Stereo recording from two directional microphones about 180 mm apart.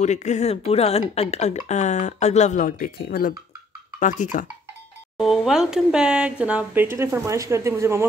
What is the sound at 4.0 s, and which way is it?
Speech, 45° left (ahead or behind).